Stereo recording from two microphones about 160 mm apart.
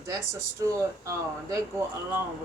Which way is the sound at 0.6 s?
20° right (ahead or behind).